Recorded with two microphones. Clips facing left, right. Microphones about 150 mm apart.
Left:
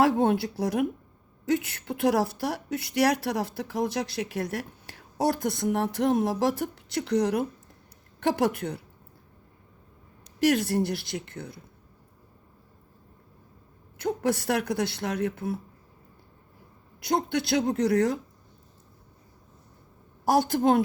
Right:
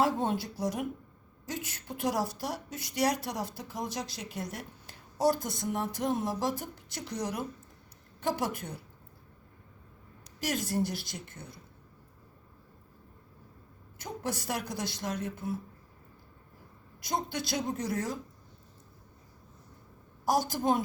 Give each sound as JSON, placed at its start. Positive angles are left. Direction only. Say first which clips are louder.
{"t": 0.0, "sound": "a woman's voice", "louder": "left 6 dB", "side_deg": 65}
{"t": 10.4, "sound": "a woman's voice", "louder": "left 8 dB", "side_deg": 65}
{"t": 14.0, "sound": "speech", "louder": "left 10 dB", "side_deg": 65}
{"t": 17.0, "sound": "a woman's voice", "louder": "left 7 dB", "side_deg": 65}
{"t": 20.2, "sound": "speech", "louder": "left 6 dB", "side_deg": 65}